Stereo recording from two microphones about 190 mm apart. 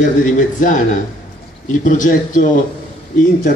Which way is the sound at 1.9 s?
45° left (ahead or behind).